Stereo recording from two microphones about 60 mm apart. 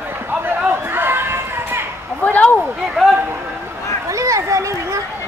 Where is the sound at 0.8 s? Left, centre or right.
Right.